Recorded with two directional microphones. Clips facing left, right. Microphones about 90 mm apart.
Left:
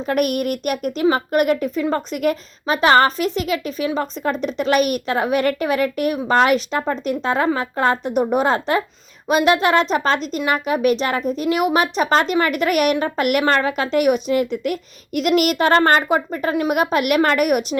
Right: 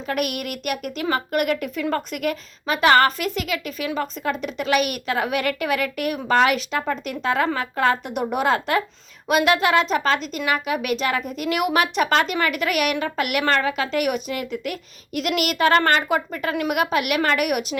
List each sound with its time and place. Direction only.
0.1 s a woman's voice: 40° left (ahead or behind); by 12.1 s 25° left (ahead or behind)
12.1 s a woman's voice: 35° left (ahead or behind)